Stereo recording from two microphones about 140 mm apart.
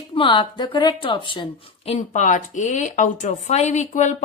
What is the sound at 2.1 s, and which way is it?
Speech, 65° left (ahead or behind).